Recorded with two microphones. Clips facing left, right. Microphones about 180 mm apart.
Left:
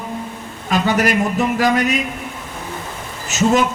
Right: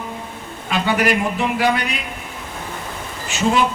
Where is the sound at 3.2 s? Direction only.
45° left (ahead or behind).